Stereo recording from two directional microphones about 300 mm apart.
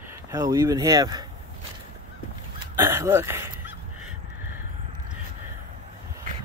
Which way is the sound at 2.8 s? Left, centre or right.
Centre.